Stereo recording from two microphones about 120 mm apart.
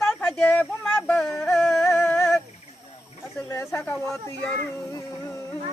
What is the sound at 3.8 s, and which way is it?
Speech, 10° left (ahead or behind).